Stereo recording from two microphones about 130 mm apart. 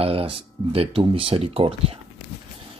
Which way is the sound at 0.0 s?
45° right (ahead or behind).